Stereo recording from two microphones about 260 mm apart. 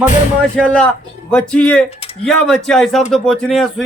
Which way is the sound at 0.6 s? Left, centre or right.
Centre.